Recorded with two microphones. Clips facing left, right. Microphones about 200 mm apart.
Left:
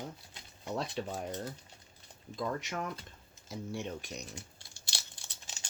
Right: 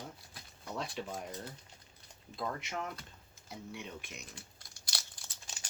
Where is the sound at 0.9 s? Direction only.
35° left (ahead or behind).